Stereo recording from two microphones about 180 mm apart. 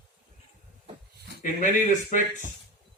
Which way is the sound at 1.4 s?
45° left (ahead or behind).